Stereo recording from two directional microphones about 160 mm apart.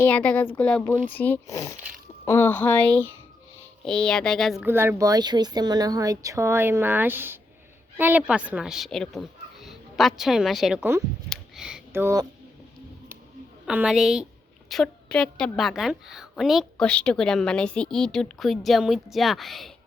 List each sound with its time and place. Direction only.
0.0 s a woman's voice: 10° left (ahead or behind)
4.6 s speech: 15° right (ahead or behind)
11.3 s a sound: 5° right (ahead or behind)
11.9 s speech: 15° right (ahead or behind)
13.7 s a woman's voice: 5° right (ahead or behind)